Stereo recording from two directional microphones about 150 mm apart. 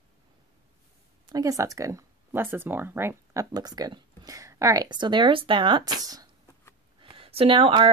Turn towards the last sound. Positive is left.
turn(degrees=-35)  # may be behind; listen again after turning